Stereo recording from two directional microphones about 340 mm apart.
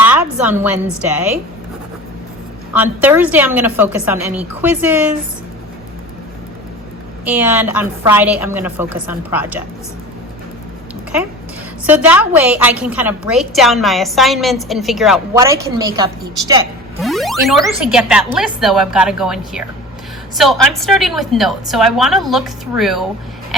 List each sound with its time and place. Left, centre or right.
0.0 s a sound: centre
2.7 s a woman's voice: centre
7.3 s a woman's voice: centre
11.9 s a woman's voice: centre
17.0 s a woman's voice: centre